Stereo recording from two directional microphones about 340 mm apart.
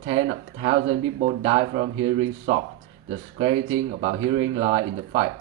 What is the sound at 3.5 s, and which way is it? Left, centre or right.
Speech, right.